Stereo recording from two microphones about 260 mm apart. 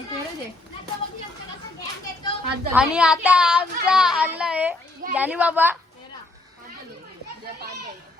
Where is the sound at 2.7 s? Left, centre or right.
Centre.